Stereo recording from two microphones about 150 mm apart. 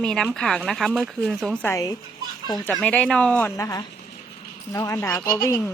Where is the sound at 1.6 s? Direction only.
20° left (ahead or behind).